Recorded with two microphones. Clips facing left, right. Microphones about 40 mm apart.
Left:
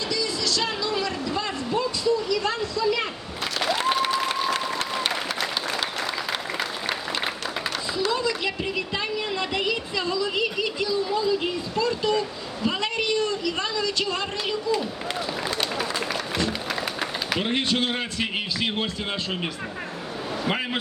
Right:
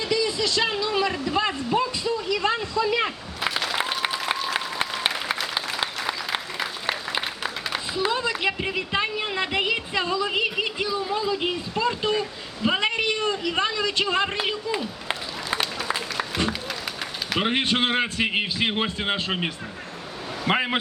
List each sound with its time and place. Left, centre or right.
0.1 s vehicle: right
6.1 s applause: centre
7.9 s speech: right
15.0 s a sound: right
17.4 s speech: right
20.5 s speech: right